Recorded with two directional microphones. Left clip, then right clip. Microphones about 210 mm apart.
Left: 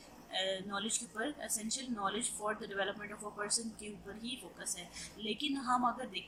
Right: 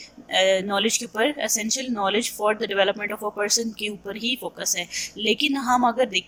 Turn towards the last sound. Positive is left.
turn(degrees=-35)  # may be behind; listen again after turning